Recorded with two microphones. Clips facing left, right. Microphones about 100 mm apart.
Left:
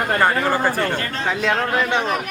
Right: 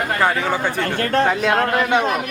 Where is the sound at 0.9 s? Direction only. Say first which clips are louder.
Right 7 dB; 50° right (ahead or behind).